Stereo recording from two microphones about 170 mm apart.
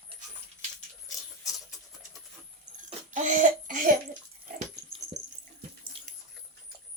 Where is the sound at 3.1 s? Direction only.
45° right (ahead or behind).